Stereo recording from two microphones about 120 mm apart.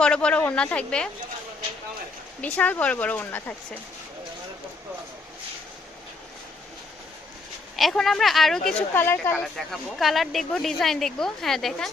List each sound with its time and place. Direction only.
0.0 s speech: 10° left (ahead or behind)
2.4 s speech: 15° left (ahead or behind)
7.8 s speech: centre (ahead or behind)
8.9 s speech: 20° left (ahead or behind)
9.4 s speech: centre (ahead or behind)